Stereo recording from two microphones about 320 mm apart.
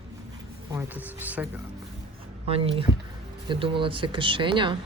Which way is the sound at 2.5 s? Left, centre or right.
Centre.